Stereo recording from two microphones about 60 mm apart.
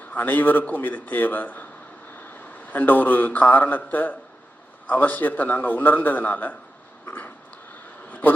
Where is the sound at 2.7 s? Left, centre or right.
Left.